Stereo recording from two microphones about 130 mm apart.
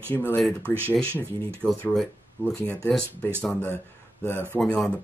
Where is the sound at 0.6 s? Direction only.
15° right (ahead or behind).